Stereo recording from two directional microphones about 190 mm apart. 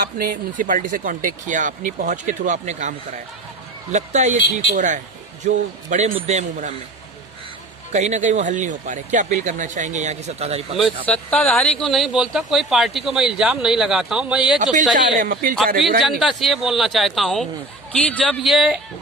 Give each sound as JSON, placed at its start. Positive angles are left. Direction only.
{"t": 0.0, "sound": "speech", "side_deg": -50}
{"t": 3.9, "sound": "speech", "side_deg": -40}
{"t": 7.9, "sound": "speech", "side_deg": -40}
{"t": 10.8, "sound": "speech", "side_deg": 5}
{"t": 14.6, "sound": "speech", "side_deg": -40}
{"t": 16.0, "sound": "speech", "side_deg": 0}